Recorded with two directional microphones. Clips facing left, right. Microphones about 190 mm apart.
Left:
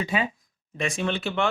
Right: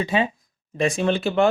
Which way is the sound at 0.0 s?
30° right (ahead or behind).